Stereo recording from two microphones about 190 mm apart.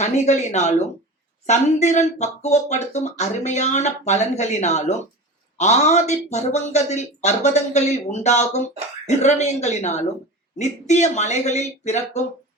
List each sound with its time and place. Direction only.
0.0 s speech: 35° left (ahead or behind)